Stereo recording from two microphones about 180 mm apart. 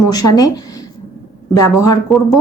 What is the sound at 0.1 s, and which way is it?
A woman's voice, 20° left (ahead or behind).